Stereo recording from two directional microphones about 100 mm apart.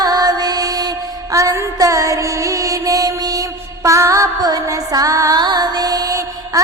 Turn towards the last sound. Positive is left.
turn(degrees=-40)  # may be behind; listen again after turning